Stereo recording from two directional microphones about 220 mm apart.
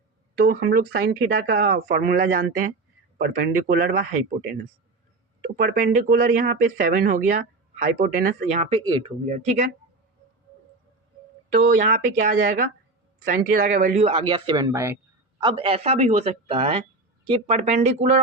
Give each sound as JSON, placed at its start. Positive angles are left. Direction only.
{"t": 0.5, "sound": "speech", "side_deg": -45}
{"t": 11.7, "sound": "speech", "side_deg": -40}
{"t": 15.4, "sound": "speech", "side_deg": -25}